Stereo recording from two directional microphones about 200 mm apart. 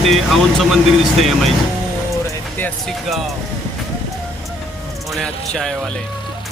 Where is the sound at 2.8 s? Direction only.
Centre (ahead or behind).